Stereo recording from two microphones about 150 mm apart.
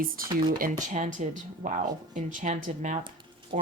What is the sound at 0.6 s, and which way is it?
Speech, 55° right (ahead or behind).